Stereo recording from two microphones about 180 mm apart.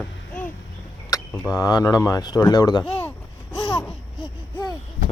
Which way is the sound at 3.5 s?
25° left (ahead or behind).